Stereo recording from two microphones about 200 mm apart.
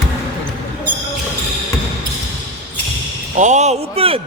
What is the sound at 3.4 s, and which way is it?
Speech, 35° right (ahead or behind).